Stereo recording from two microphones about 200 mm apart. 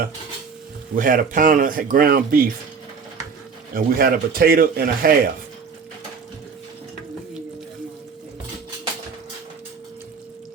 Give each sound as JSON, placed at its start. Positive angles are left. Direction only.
{"t": 0.9, "sound": "speech", "side_deg": -40}
{"t": 3.8, "sound": "speech", "side_deg": -45}